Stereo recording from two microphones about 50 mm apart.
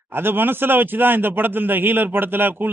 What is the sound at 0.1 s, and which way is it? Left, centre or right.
Speech, right.